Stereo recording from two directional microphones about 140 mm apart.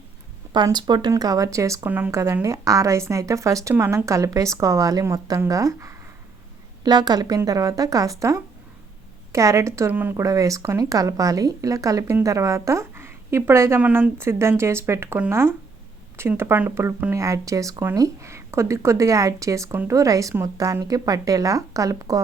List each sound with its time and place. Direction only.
0.5 s speech: 30° right (ahead or behind)